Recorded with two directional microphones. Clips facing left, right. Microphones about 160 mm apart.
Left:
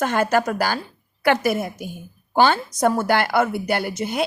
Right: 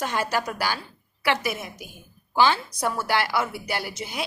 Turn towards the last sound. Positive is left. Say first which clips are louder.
# left 8 dB
turn(degrees=55)  # may be behind; listen again after turning